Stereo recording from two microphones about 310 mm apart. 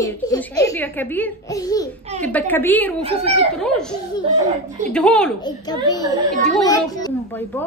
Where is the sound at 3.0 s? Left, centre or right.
Centre.